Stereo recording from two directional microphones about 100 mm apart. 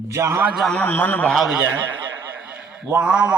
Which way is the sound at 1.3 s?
Centre (ahead or behind).